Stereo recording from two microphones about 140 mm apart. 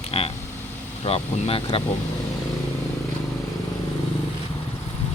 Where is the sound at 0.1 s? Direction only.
40° left (ahead or behind).